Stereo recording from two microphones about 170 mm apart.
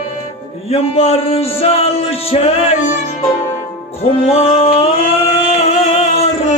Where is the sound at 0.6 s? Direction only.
35° left (ahead or behind).